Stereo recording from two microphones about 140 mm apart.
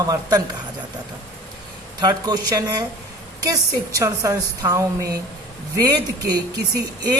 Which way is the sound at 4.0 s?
25° right (ahead or behind).